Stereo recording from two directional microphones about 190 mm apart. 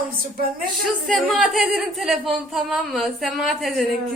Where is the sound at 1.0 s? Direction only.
Centre (ahead or behind).